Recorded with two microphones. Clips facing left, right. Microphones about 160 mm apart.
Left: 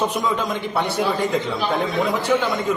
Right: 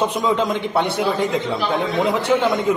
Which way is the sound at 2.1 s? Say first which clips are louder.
Right 3 dB; 25° right (ahead or behind).